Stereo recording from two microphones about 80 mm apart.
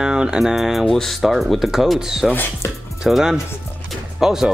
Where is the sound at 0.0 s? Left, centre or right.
Centre.